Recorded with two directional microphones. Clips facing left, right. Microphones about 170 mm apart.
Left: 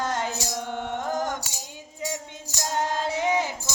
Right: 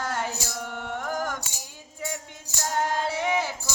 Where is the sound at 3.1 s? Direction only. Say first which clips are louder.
Left 2 dB; 20° left (ahead or behind).